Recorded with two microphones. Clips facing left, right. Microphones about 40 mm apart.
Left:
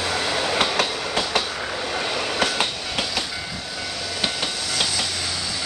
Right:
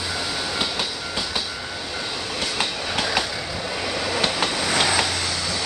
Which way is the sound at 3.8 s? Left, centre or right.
Right.